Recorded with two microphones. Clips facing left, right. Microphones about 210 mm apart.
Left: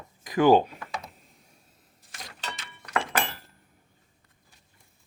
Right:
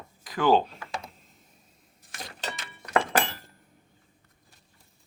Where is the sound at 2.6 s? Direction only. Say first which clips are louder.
Right 5 dB; 40° right (ahead or behind).